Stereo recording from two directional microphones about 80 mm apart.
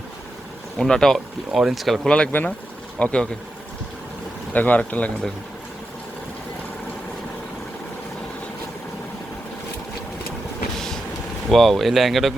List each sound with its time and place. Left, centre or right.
0.8 s speech: centre
2.0 s speech: centre
4.5 s speech: centre
10.8 s vehicle: centre
11.5 s speech: centre